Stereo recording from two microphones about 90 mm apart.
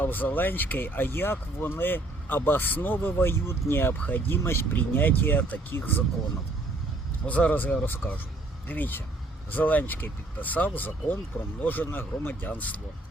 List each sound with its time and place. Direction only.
0.0 s speech: 20° left (ahead or behind)
7.3 s speech: 15° left (ahead or behind)